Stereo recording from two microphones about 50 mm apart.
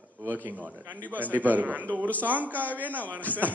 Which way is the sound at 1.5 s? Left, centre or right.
Right.